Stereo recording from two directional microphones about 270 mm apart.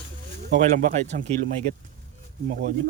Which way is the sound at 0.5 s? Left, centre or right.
Right.